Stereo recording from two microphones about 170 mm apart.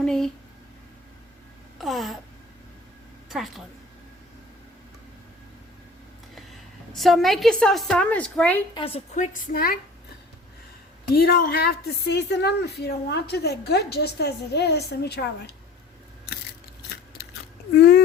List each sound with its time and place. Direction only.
0.0 s a sound: 5° left (ahead or behind)
1.8 s a woman's voice: centre (ahead or behind)
3.2 s a woman's voice: centre (ahead or behind)
6.9 s a woman's voice: centre (ahead or behind)
8.7 s a woman's voice: 35° left (ahead or behind)
9.1 s a woman's voice: 50° left (ahead or behind)
11.1 s a woman's voice: 60° left (ahead or behind)
17.7 s a woman's voice: 75° left (ahead or behind)